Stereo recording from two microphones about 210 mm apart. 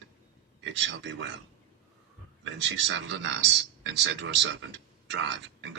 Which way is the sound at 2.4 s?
60° right (ahead or behind).